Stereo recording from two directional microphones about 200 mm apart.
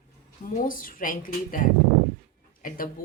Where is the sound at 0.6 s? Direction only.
45° left (ahead or behind).